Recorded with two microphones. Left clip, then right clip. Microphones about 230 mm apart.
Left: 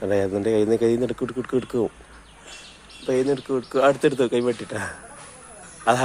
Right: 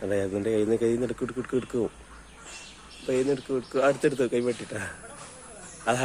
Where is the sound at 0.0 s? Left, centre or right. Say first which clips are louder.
Left 5 dB; centre.